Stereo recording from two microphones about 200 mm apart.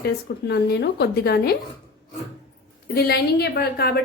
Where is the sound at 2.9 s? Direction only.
50° left (ahead or behind).